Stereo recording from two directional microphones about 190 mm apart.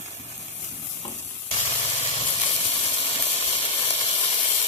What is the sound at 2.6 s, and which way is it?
Steam, 30° left (ahead or behind).